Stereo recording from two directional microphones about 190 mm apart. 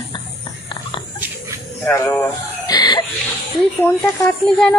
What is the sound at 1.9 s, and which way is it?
Music, 10° left (ahead or behind).